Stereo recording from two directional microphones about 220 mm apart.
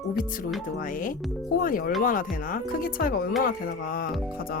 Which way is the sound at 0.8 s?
40° left (ahead or behind).